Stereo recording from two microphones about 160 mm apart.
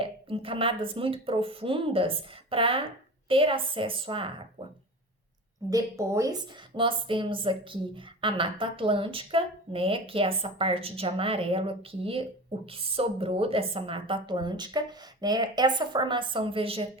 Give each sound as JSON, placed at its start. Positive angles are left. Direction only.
{"t": 0.0, "sound": "speech", "side_deg": -35}
{"t": 5.7, "sound": "speech", "side_deg": -20}